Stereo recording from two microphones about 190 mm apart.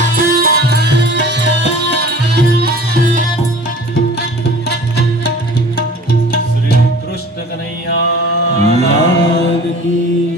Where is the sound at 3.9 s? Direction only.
55° left (ahead or behind).